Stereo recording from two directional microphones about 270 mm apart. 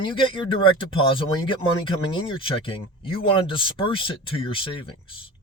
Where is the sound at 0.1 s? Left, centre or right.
Centre.